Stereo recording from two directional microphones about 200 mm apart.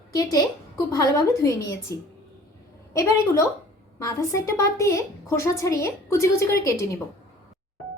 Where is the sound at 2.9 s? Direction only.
15° left (ahead or behind).